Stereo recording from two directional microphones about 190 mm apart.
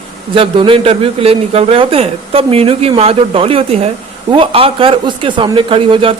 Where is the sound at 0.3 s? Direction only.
30° right (ahead or behind).